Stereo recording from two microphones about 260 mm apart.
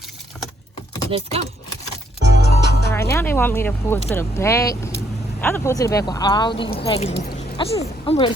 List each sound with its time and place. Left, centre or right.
1.1 s speech: right
2.4 s music: left
2.9 s speech: centre